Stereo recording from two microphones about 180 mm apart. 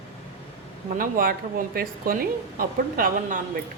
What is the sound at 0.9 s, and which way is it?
A woman's voice, 50° right (ahead or behind).